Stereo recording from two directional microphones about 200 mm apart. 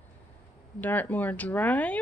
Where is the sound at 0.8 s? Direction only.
10° left (ahead or behind).